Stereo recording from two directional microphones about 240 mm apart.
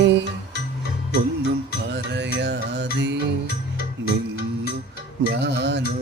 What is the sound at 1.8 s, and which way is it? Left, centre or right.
Music, right.